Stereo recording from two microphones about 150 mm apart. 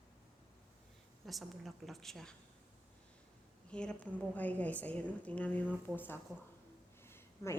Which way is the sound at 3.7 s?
5° left (ahead or behind).